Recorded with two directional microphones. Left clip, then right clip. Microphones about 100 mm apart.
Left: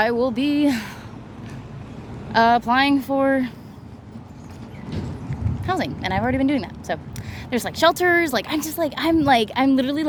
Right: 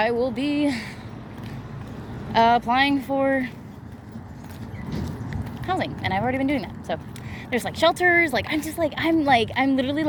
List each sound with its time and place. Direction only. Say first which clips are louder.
0.0 s a sound: left 3 dB; 90° left
2.3 s speech: left 2 dB; 45° left (ahead or behind)
4.9 s clip-clop: left 1 dB; centre (ahead or behind)
5.6 s speech: left 2 dB; 70° left (ahead or behind)
7.5 s speech: left 2 dB; 55° left (ahead or behind)
9.1 s speech: left 2 dB; 70° left (ahead or behind)